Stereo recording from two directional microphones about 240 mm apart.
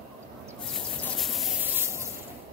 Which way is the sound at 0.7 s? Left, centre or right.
Centre.